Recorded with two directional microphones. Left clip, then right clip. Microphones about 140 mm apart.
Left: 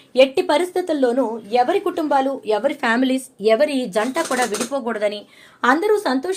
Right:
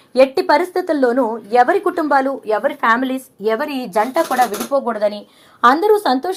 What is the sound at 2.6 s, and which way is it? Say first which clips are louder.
Speech: right 5 dB; 30° left (ahead or behind).